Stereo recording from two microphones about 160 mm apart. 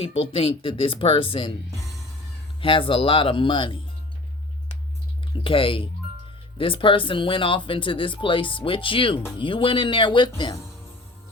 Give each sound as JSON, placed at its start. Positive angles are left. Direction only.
{"t": 0.0, "sound": "speech", "side_deg": 35}
{"t": 2.6, "sound": "speech", "side_deg": 35}
{"t": 5.3, "sound": "speech", "side_deg": 35}